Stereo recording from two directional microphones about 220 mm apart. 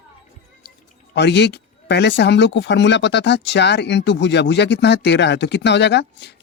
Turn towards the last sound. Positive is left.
turn(degrees=50)  # may be behind; listen again after turning